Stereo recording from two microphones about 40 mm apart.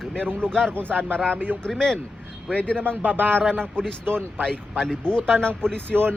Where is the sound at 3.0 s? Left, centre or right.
Right.